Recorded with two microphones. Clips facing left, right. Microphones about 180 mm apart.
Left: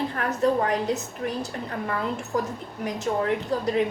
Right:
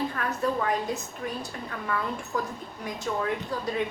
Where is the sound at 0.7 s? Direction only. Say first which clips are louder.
Left 3 dB; 75° left (ahead or behind).